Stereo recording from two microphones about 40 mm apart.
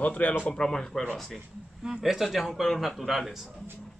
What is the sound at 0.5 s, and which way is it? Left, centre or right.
Speech, centre.